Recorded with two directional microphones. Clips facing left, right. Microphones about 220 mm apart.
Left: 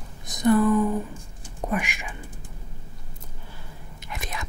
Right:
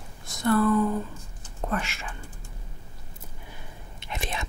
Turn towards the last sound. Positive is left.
turn(degrees=-25)  # may be behind; listen again after turning